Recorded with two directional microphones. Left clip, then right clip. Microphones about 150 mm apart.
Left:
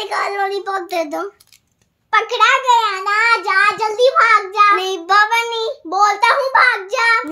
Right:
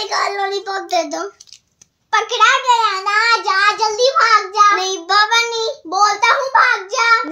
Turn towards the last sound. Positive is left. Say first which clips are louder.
# right 1 dB
turn(degrees=0)  # may be behind; listen again after turning